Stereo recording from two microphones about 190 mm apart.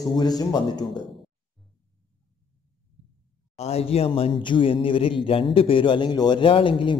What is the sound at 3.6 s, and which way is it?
A man's voice, 35° left (ahead or behind).